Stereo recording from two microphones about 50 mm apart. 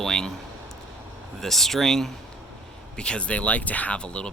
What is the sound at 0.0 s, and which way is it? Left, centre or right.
Speech, centre.